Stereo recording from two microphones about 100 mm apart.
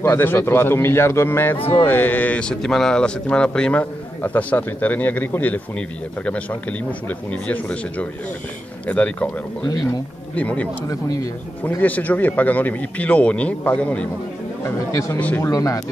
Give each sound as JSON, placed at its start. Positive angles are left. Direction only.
{"t": 0.0, "sound": "a man's voice", "side_deg": 20}
{"t": 1.6, "sound": "speech", "side_deg": 70}
{"t": 1.9, "sound": "a man's voice", "side_deg": 20}
{"t": 10.3, "sound": "a man's voice", "side_deg": 15}
{"t": 10.9, "sound": "speech", "side_deg": 35}
{"t": 11.8, "sound": "a man's voice", "side_deg": 15}
{"t": 15.1, "sound": "a man's voice", "side_deg": 15}
{"t": 15.4, "sound": "speech", "side_deg": 35}